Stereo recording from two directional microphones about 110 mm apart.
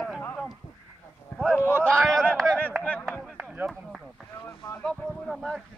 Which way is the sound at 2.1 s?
5° left (ahead or behind).